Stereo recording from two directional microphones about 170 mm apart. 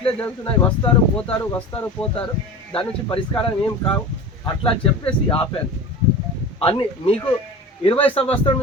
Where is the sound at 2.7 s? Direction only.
30° left (ahead or behind).